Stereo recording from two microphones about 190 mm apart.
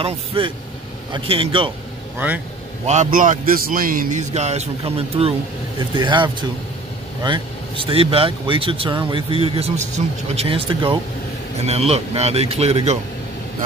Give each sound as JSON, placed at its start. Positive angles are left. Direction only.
{"t": 0.0, "sound": "speech", "side_deg": -30}
{"t": 2.1, "sound": "speech", "side_deg": -10}
{"t": 2.9, "sound": "a man's voice", "side_deg": -40}